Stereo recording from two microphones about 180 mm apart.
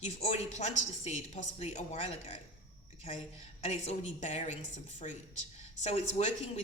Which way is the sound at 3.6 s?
35° left (ahead or behind).